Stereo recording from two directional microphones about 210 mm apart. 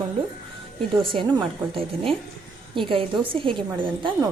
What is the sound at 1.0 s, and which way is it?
A woman's voice, 25° right (ahead or behind).